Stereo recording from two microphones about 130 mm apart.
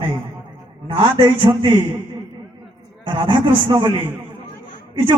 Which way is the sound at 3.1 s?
40° right (ahead or behind).